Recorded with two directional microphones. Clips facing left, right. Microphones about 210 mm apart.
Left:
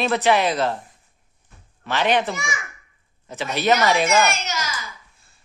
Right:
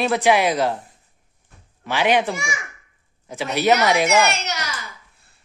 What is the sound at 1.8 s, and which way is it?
A man's voice, 10° right (ahead or behind).